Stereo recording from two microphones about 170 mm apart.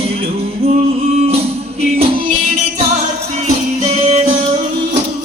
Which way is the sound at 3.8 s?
40° right (ahead or behind).